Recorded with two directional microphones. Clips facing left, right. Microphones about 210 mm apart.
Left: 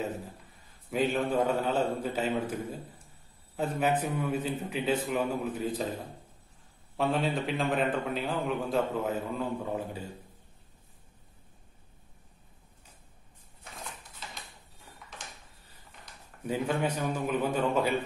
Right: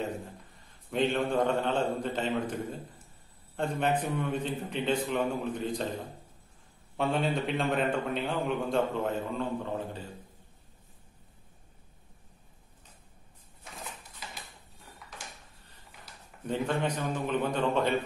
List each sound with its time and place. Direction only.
0.8 s a man's voice: 5° left (ahead or behind)
7.0 s a man's voice: centre (ahead or behind)
16.4 s a man's voice: 10° left (ahead or behind)